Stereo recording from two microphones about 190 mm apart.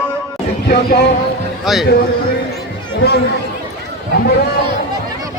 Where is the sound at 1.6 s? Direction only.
Centre (ahead or behind).